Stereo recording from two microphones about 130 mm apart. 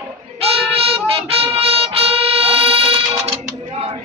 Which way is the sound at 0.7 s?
50° right (ahead or behind).